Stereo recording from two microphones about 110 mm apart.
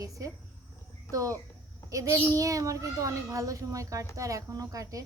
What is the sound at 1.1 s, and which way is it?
A child's voice, 30° right (ahead or behind).